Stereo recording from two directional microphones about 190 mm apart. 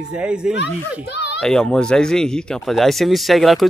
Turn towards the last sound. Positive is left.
turn(degrees=0)  # may be behind; listen again after turning